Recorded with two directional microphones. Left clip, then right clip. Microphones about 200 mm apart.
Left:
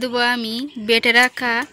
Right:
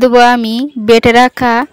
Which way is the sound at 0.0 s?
55° right (ahead or behind).